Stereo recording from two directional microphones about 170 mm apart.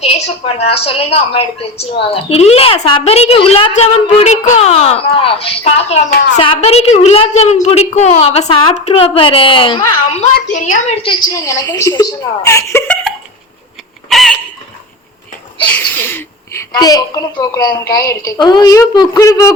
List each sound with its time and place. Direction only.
0.0 s a woman's voice: 35° left (ahead or behind)
3.7 s a woman's voice: 45° left (ahead or behind)
10.3 s a woman's voice: 50° left (ahead or behind); by 11.2 s 35° left (ahead or behind)
11.3 s a woman's voice: 20° left (ahead or behind)
14.1 s a sound: centre (ahead or behind)
15.6 s speech: 10° left (ahead or behind)
16.7 s a woman's voice: 25° left (ahead or behind)